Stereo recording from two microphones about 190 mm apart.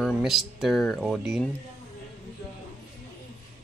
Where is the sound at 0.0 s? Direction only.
Centre (ahead or behind).